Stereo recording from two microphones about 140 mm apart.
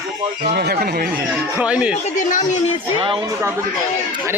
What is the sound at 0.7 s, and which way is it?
Speech, 90° right.